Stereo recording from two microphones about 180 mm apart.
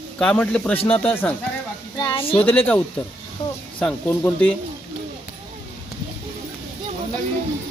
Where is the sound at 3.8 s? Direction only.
10° left (ahead or behind).